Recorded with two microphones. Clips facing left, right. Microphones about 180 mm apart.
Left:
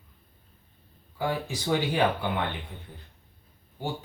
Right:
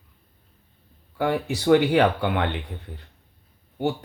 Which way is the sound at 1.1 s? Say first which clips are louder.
Right 6 dB; 65° right (ahead or behind).